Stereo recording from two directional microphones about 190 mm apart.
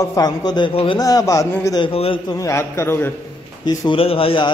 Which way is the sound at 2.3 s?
15° left (ahead or behind).